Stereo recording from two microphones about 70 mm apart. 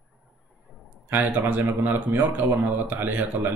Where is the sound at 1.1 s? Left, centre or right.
Right.